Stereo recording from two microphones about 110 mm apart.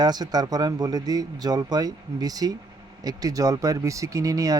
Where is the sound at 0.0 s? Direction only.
40° right (ahead or behind).